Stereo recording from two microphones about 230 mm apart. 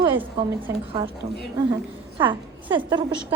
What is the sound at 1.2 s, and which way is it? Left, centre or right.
Speech, right.